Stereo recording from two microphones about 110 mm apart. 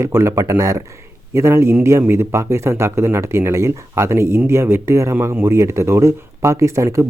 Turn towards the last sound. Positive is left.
turn(degrees=-30)  # may be behind; listen again after turning